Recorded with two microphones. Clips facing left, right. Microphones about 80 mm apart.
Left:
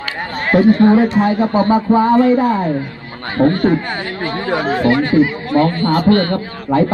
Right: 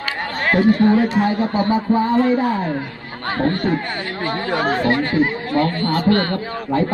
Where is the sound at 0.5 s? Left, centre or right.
Left.